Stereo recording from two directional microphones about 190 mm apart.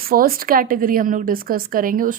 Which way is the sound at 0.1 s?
50° right (ahead or behind).